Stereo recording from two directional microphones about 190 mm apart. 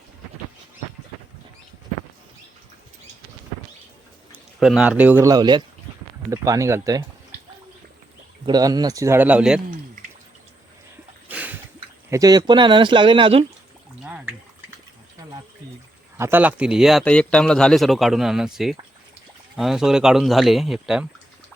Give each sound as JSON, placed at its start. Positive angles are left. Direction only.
{"t": 4.6, "sound": "speech", "side_deg": -5}
{"t": 8.4, "sound": "speech", "side_deg": -20}
{"t": 11.3, "sound": "a sound", "side_deg": -10}
{"t": 12.1, "sound": "speech", "side_deg": -20}
{"t": 14.0, "sound": "a sound", "side_deg": -5}
{"t": 16.1, "sound": "a man's voice", "side_deg": -10}